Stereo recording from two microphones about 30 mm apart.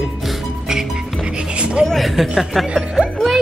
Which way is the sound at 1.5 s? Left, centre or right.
Right.